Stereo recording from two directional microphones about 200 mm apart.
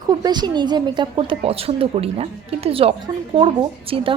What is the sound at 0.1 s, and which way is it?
A woman's voice, 20° right (ahead or behind).